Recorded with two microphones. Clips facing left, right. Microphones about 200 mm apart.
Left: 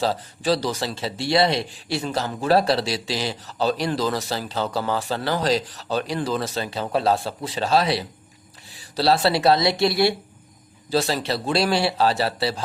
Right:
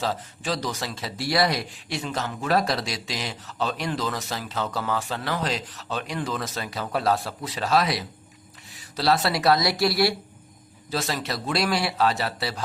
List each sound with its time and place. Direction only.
0.0 s a man's voice: 35° left (ahead or behind)